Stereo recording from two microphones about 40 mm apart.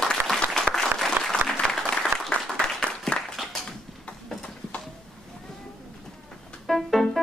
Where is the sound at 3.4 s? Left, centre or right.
Centre.